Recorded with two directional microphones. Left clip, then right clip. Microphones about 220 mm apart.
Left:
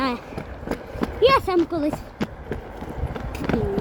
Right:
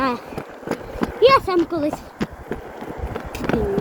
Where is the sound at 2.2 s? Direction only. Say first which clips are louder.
Right 2 dB; 40° right (ahead or behind).